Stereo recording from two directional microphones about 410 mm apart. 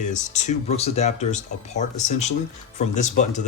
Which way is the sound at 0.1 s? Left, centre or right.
Centre.